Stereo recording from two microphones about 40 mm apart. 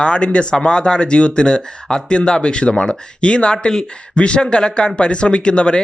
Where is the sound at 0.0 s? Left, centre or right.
Left.